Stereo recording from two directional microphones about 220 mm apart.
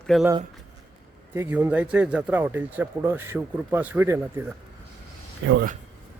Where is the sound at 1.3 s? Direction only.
10° right (ahead or behind).